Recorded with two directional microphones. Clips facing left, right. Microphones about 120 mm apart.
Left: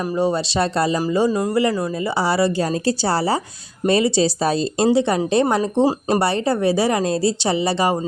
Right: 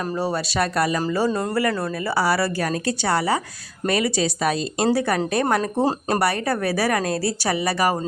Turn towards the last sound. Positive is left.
turn(degrees=25)  # may be behind; listen again after turning